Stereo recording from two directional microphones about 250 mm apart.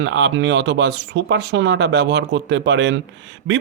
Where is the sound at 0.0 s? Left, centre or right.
Right.